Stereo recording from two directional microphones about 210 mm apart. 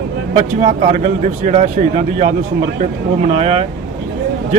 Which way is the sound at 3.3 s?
30° right (ahead or behind).